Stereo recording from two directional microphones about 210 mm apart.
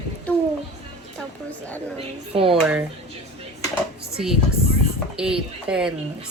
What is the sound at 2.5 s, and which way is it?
Speech, 5° right (ahead or behind).